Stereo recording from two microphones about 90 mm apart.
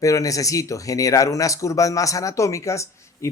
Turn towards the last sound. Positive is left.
turn(degrees=35)  # may be behind; listen again after turning